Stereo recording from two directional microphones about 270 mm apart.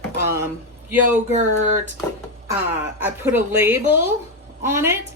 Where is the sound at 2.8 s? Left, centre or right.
Centre.